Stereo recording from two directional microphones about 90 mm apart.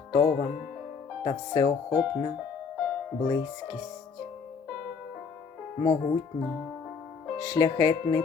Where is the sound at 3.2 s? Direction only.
45° left (ahead or behind).